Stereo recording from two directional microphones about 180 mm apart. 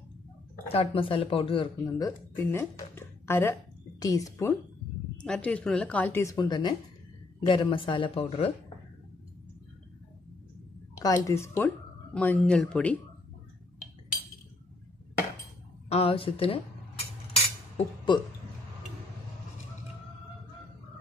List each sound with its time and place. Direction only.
0.7 s speech: 30° left (ahead or behind)
5.1 s speech: 5° left (ahead or behind); by 8.5 s 35° left (ahead or behind)
11.0 s speech: 20° left (ahead or behind)
15.9 s a woman's voice: 30° left (ahead or behind)
17.3 s cutlery: 30° left (ahead or behind)